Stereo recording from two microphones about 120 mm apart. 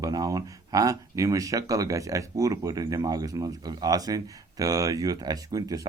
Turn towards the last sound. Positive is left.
turn(degrees=-30)  # may be behind; listen again after turning